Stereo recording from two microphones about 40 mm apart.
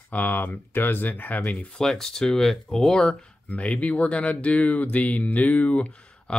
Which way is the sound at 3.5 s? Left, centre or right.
Left.